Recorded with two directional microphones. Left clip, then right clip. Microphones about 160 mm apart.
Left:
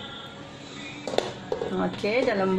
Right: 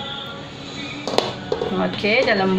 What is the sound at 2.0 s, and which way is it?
Speech, 65° left (ahead or behind).